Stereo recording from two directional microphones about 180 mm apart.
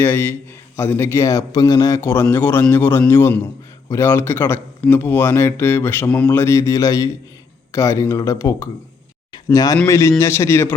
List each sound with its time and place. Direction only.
0.0 s speech: 10° left (ahead or behind)